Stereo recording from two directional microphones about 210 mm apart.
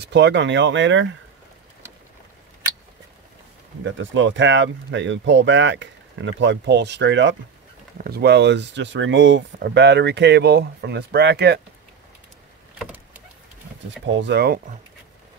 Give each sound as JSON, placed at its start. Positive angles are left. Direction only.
{"t": 0.0, "sound": "speech", "side_deg": -55}
{"t": 3.8, "sound": "speech", "side_deg": -60}
{"t": 12.7, "sound": "vehicle", "side_deg": -10}
{"t": 14.0, "sound": "speech", "side_deg": -60}